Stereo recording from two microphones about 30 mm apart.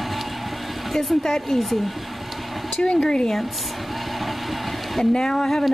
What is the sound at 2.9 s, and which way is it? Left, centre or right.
Speech, left.